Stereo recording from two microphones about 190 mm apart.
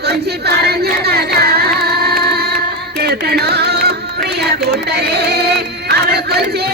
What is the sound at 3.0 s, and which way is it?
Carnatic music, 55° right (ahead or behind).